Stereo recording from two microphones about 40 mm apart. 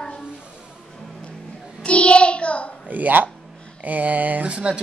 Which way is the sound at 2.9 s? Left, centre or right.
Right.